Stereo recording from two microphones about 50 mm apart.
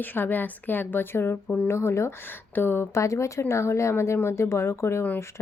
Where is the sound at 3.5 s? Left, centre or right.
Left.